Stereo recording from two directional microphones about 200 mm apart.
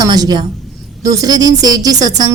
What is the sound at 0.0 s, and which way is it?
A woman's voice, 20° right (ahead or behind).